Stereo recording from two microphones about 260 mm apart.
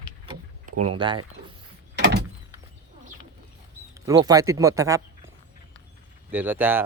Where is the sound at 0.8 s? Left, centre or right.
Centre.